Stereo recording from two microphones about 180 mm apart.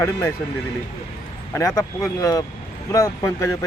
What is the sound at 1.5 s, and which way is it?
Speech, 20° left (ahead or behind).